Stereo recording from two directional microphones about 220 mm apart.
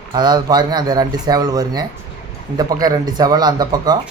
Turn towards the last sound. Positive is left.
turn(degrees=-15)  # may be behind; listen again after turning